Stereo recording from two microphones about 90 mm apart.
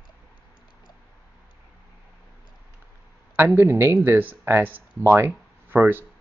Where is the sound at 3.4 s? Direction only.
25° right (ahead or behind).